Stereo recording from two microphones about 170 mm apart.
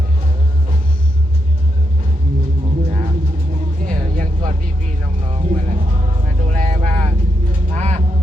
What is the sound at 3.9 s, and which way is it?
Music, 50° right (ahead or behind).